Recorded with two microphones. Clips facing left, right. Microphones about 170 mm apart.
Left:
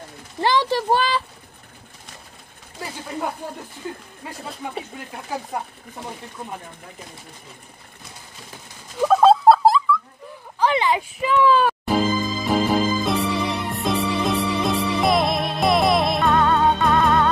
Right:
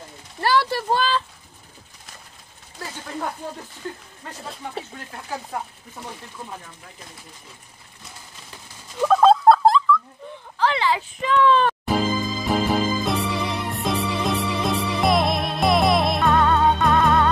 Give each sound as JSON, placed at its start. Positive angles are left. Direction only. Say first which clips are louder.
{"t": 0.4, "sound": "speech", "louder": "left 1 dB", "side_deg": 15}
{"t": 3.8, "sound": "speech", "louder": "left 1 dB", "side_deg": 10}
{"t": 4.9, "sound": "speech", "louder": "left 2 dB", "side_deg": 15}
{"t": 9.0, "sound": "a sound", "louder": "left 1 dB", "side_deg": 5}
{"t": 10.6, "sound": "a sound", "louder": "left 2 dB", "side_deg": 20}
{"t": 11.1, "sound": "music", "louder": "even", "side_deg": 10}